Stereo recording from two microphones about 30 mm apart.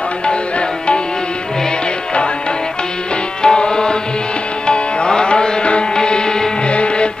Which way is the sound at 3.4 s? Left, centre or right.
Left.